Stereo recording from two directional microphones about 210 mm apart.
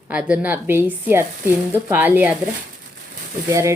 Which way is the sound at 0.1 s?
5° right (ahead or behind).